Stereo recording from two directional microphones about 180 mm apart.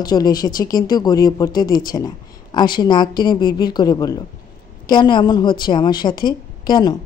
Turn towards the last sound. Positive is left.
turn(degrees=25)  # may be behind; listen again after turning